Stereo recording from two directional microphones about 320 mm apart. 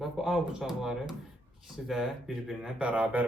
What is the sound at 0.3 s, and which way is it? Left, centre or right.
Speech, centre.